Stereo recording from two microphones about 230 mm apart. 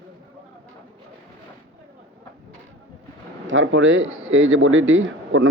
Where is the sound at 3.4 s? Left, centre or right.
Right.